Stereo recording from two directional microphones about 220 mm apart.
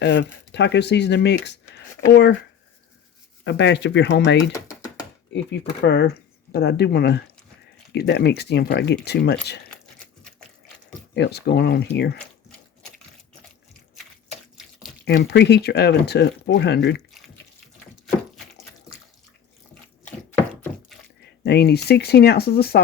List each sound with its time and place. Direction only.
0.0 s speech: 55° left (ahead or behind)
3.4 s speech: 55° left (ahead or behind)
11.1 s speech: 50° left (ahead or behind)
15.0 s speech: 45° left (ahead or behind)
21.4 s speech: 50° left (ahead or behind)